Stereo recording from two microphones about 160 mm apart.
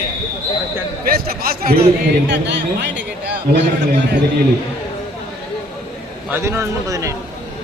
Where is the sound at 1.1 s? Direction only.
70° right (ahead or behind).